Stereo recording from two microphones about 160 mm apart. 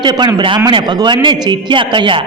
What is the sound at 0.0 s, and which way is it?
A man's voice, 25° right (ahead or behind).